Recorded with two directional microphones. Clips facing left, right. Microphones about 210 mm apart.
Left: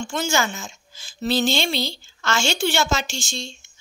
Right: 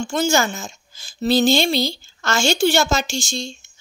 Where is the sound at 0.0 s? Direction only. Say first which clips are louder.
Right 4 dB; 35° right (ahead or behind).